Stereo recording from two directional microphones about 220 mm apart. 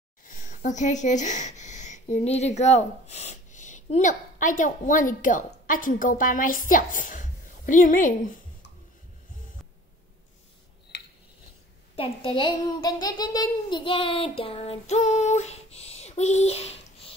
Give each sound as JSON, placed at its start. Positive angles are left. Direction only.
{"t": 0.2, "sound": "speech", "side_deg": 35}
{"t": 11.9, "sound": "a child's voice", "side_deg": 25}